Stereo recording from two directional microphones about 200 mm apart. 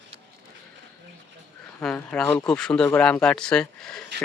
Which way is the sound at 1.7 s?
10° left (ahead or behind).